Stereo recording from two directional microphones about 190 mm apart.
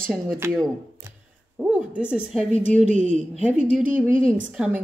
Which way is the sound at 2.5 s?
40° right (ahead or behind).